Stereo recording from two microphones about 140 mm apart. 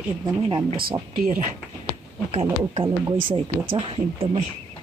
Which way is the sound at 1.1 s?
65° right (ahead or behind).